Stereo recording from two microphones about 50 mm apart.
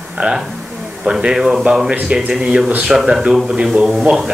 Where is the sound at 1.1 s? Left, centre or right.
Centre.